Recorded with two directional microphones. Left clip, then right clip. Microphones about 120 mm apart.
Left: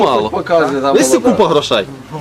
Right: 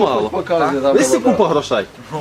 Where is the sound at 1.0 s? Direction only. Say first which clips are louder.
Left 5 dB; 25° left (ahead or behind).